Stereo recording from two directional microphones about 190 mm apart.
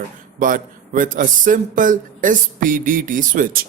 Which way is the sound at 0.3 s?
45° right (ahead or behind).